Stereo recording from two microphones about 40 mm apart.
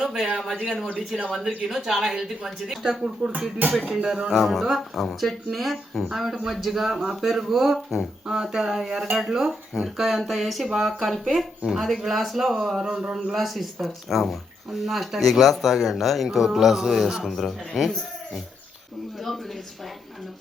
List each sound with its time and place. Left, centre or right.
0.3 s speech: centre
3.0 s speech: right
3.7 s speech: centre
3.9 s speech: centre
4.3 s speech: centre
17.2 s speech: centre